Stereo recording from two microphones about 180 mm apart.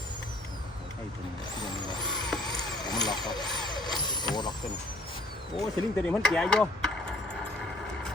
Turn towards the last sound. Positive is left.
turn(degrees=5)  # may be behind; listen again after turning